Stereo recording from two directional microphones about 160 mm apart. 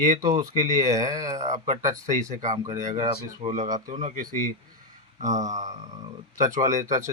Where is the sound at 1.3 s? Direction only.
50° right (ahead or behind).